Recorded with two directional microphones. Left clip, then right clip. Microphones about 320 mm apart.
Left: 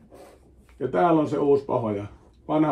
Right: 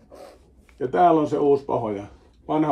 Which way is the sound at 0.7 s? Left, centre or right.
Centre.